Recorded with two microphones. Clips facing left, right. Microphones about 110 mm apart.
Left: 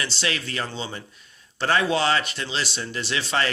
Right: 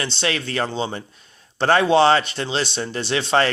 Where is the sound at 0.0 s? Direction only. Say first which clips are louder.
Right 4 dB; 30° right (ahead or behind).